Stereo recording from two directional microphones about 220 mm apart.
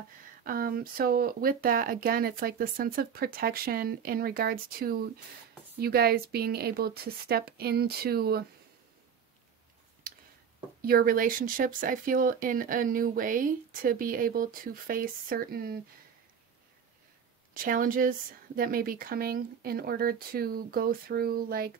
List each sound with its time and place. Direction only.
0.4 s speech: 40° right (ahead or behind)
10.8 s speech: 40° right (ahead or behind)
17.6 s speech: 40° right (ahead or behind)